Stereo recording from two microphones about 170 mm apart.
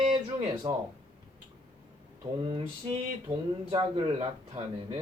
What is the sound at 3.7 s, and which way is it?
Speech, 30° right (ahead or behind).